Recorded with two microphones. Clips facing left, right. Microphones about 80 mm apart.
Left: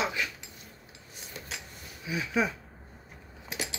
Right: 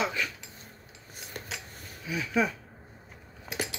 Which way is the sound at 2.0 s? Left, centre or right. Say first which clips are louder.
Right 1 dB; centre.